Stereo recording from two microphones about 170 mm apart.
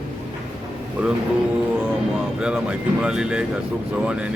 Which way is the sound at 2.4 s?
5° right (ahead or behind).